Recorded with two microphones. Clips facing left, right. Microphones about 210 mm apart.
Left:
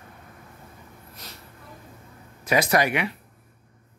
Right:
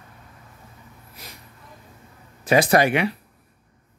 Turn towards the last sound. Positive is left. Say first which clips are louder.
# right 4 dB
turn(degrees=-30)  # may be behind; listen again after turning